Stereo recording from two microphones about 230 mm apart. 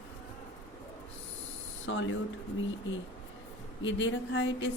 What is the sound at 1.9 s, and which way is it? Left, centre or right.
Speech, left.